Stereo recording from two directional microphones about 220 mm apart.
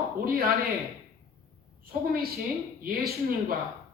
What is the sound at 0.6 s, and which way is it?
Speech, centre (ahead or behind).